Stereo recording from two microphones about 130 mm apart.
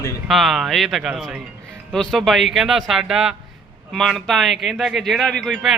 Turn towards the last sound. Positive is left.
turn(degrees=0)  # may be behind; listen again after turning